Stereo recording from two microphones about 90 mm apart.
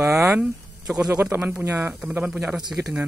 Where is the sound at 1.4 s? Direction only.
15° right (ahead or behind).